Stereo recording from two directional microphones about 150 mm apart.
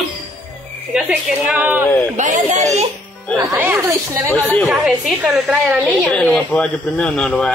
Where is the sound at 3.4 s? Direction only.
15° right (ahead or behind).